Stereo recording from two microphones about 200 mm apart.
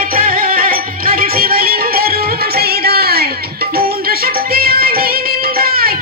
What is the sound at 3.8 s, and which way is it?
Music, 50° right (ahead or behind).